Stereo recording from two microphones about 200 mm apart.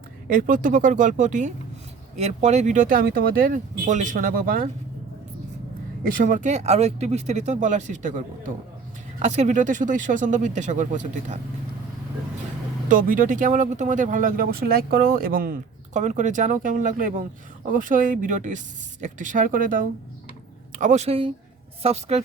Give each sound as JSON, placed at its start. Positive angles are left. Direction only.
{"t": 0.3, "sound": "speech", "side_deg": -45}
{"t": 6.0, "sound": "speech", "side_deg": -40}
{"t": 12.9, "sound": "a woman's voice", "side_deg": -45}